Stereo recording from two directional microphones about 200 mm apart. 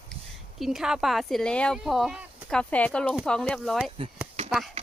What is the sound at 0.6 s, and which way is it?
Speech, centre (ahead or behind).